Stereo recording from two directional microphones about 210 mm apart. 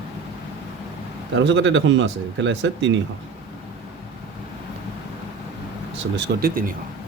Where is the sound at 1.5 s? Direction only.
60° right (ahead or behind).